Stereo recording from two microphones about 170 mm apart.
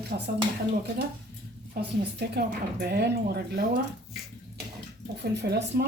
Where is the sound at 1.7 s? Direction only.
70° right (ahead or behind).